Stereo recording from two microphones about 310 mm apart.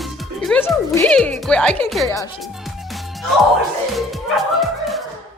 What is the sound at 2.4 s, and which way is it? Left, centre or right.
Music, centre.